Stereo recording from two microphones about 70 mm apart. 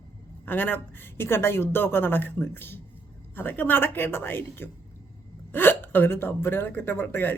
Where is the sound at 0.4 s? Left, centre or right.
Left.